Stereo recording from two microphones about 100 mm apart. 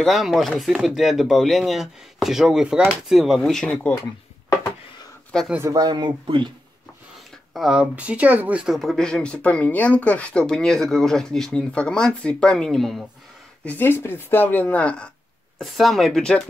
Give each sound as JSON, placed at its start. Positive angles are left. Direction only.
{"t": 0.0, "sound": "speech", "side_deg": 0}
{"t": 5.6, "sound": "speech", "side_deg": -40}
{"t": 7.5, "sound": "speech", "side_deg": -5}
{"t": 8.6, "sound": "speech", "side_deg": 0}
{"t": 13.7, "sound": "speech", "side_deg": 20}
{"t": 15.6, "sound": "speech", "side_deg": 0}